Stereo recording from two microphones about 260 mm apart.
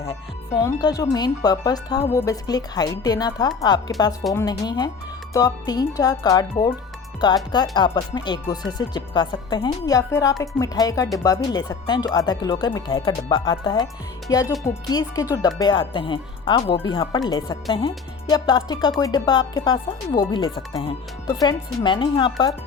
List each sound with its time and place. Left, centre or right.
0.0 s speech: left
4.2 s speech: centre
4.4 s speech: centre